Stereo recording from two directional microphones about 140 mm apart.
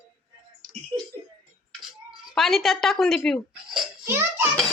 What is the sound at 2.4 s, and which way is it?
Speech, centre (ahead or behind).